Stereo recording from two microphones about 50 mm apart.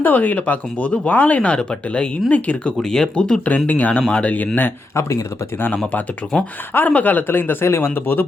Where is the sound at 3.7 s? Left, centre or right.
Left.